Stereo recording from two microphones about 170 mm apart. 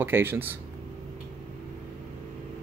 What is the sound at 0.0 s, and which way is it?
Speech, 10° right (ahead or behind).